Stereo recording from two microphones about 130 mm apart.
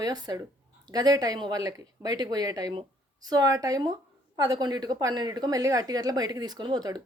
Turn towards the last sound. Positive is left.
turn(degrees=-30)  # may be behind; listen again after turning